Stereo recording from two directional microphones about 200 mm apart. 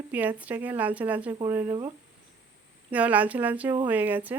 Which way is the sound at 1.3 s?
20° right (ahead or behind).